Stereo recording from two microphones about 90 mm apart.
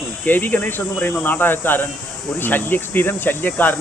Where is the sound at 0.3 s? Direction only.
20° left (ahead or behind).